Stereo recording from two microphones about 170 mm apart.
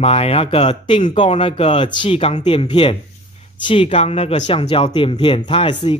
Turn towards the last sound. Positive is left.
turn(degrees=30)  # may be behind; listen again after turning